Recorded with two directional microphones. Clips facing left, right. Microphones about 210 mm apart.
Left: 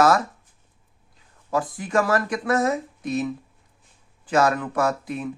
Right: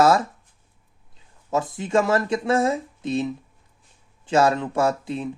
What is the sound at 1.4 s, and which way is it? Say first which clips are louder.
Speech: right 1 dB; 25° right (ahead or behind).